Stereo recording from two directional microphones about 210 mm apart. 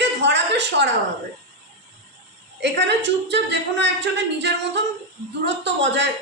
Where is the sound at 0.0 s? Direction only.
55° right (ahead or behind).